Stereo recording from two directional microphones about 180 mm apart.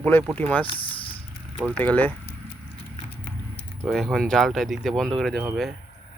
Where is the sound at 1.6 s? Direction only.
10° left (ahead or behind).